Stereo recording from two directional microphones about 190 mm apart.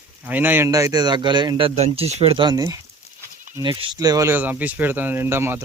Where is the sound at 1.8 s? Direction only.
35° right (ahead or behind).